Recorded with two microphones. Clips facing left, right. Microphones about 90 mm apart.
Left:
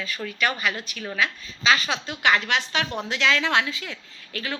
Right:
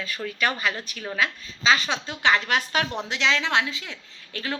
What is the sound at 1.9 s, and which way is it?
Speech, 20° right (ahead or behind).